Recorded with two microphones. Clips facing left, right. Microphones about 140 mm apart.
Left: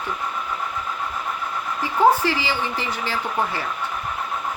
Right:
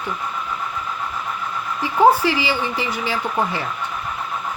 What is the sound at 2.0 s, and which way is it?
Speech, 15° right (ahead or behind).